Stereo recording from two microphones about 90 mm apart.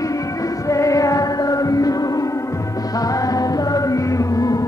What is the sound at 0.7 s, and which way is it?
Music, 35° left (ahead or behind).